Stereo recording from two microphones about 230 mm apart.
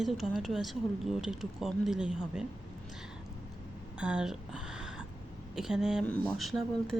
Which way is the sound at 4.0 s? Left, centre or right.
Centre.